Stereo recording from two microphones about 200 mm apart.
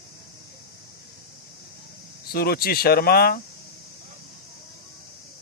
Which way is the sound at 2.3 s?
50° left (ahead or behind).